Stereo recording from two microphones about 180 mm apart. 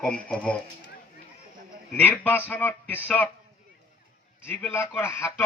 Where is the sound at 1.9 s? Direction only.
10° left (ahead or behind).